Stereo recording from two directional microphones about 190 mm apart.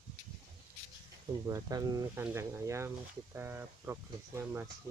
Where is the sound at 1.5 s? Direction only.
20° right (ahead or behind).